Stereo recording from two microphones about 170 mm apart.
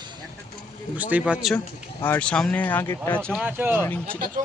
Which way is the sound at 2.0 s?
10° left (ahead or behind).